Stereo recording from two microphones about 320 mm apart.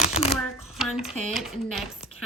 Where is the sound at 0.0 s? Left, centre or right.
Centre.